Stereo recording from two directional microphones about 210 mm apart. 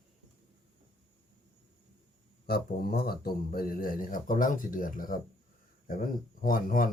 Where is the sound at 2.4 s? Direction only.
45° left (ahead or behind).